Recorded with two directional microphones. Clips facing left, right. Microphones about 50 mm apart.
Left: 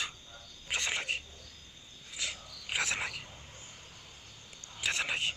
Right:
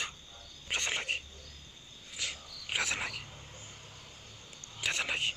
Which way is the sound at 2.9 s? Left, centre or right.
Centre.